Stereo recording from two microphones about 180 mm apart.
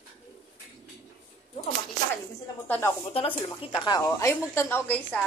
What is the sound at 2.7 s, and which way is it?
A woman's voice, 15° left (ahead or behind).